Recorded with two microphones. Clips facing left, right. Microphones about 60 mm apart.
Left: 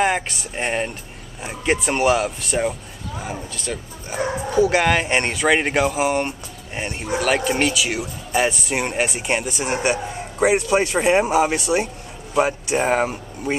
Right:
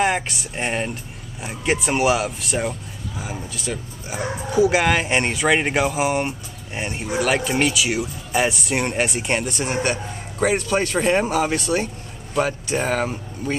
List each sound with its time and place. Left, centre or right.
0.0 s speech: centre; by 13.6 s left